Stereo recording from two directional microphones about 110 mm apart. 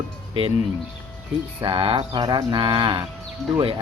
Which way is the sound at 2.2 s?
40° right (ahead or behind).